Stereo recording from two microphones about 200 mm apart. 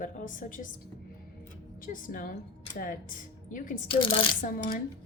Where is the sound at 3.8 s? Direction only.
25° left (ahead or behind).